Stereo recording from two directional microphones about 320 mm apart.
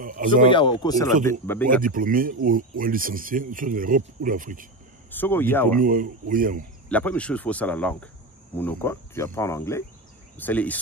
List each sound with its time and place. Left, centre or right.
0.0 s speech: right
0.5 s speech: centre
1.1 s speech: right
1.4 s speech: centre
1.8 s speech: right
5.1 s speech: centre
5.8 s speech: right
6.9 s speech: centre